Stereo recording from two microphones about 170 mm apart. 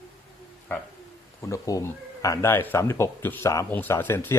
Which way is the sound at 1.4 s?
20° left (ahead or behind).